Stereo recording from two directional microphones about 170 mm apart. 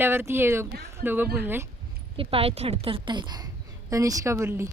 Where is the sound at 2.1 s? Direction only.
35° right (ahead or behind); by 4.7 s 15° right (ahead or behind).